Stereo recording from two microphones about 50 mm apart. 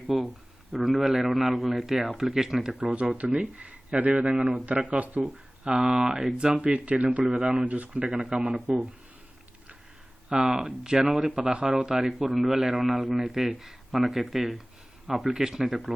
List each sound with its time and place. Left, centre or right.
0.1 s a man's voice: centre
2.7 s speech: right
5.6 s speech: centre; by 7.3 s right
7.3 s speech: centre
7.6 s speech: right
8.0 s speech: centre
10.2 s speech: centre
11.3 s speech: right; by 13.0 s centre
13.0 s speech: right
13.2 s speech: centre
15.3 s speech: centre